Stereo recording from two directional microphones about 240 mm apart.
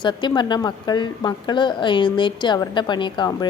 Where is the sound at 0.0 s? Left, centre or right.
Centre.